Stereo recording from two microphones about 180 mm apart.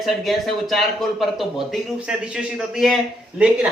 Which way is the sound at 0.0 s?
Centre (ahead or behind).